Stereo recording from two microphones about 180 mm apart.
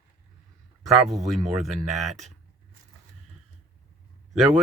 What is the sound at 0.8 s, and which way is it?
Speech, centre (ahead or behind).